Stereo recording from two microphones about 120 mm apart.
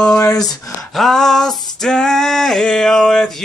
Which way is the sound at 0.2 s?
30° left (ahead or behind).